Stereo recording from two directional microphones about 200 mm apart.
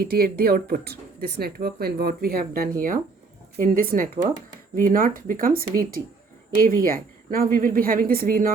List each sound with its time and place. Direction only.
0.0 s speech: 50° right (ahead or behind)